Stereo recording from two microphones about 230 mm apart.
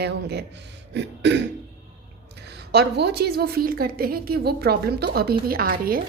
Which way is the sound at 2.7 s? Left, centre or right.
Right.